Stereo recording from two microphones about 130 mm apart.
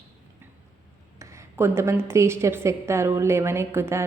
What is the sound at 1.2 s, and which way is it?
A woman's voice, 20° right (ahead or behind).